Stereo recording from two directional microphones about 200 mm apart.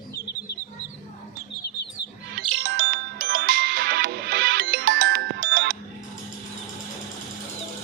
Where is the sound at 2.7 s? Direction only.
45° right (ahead or behind).